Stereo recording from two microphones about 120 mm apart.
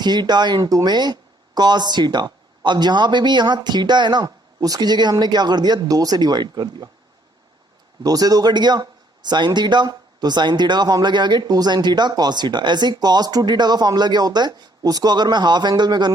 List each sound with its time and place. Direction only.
0.0 s speech: 35° right (ahead or behind)
8.0 s speech: 30° right (ahead or behind)